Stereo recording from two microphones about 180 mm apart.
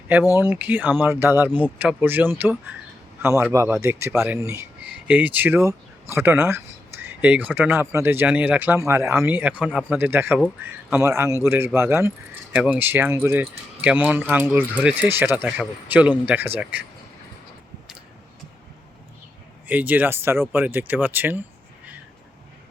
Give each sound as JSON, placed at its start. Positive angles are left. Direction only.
{"t": 0.3, "sound": "speech", "side_deg": -10}
{"t": 19.6, "sound": "speech", "side_deg": -10}